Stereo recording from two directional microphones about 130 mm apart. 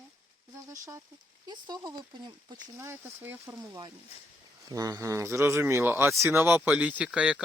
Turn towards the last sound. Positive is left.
turn(degrees=-10)  # may be behind; listen again after turning